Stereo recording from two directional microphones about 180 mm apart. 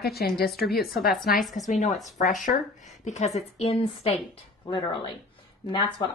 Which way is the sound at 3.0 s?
40° left (ahead or behind).